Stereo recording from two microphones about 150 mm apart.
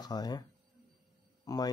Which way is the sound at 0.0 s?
25° left (ahead or behind).